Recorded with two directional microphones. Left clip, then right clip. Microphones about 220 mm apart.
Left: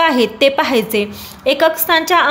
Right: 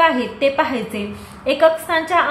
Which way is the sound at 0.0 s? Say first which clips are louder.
Left 3 dB; 50° left (ahead or behind).